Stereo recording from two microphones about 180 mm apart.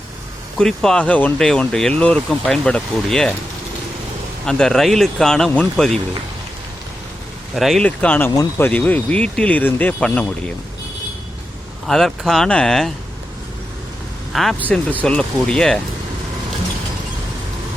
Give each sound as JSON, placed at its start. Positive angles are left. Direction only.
{"t": 0.6, "sound": "speech", "side_deg": 5}
{"t": 4.4, "sound": "speech", "side_deg": 5}
{"t": 7.5, "sound": "speech", "side_deg": 0}
{"t": 11.9, "sound": "speech", "side_deg": 0}
{"t": 14.3, "sound": "speech", "side_deg": 0}